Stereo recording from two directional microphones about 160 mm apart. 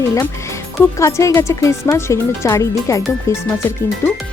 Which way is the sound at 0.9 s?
20° left (ahead or behind).